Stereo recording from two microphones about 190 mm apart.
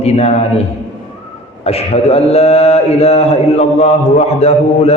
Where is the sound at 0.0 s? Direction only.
35° left (ahead or behind).